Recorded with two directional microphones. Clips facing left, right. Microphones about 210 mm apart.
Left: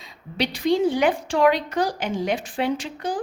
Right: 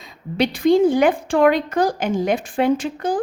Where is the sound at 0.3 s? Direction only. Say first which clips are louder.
Right 6 dB; 50° right (ahead or behind).